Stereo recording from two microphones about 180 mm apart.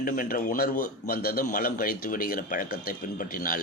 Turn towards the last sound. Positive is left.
turn(degrees=50)  # may be behind; listen again after turning